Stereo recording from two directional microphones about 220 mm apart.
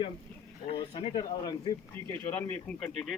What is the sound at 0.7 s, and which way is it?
Speech, 20° left (ahead or behind).